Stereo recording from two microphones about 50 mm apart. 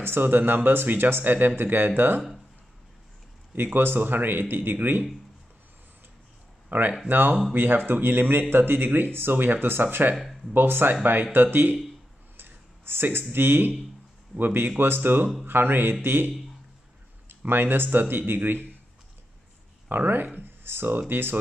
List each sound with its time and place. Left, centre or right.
0.0 s speech: right
3.5 s speech: right
6.7 s speech: right
12.4 s a sound: right
14.3 s speech: right
17.5 s speech: right
19.9 s speech: right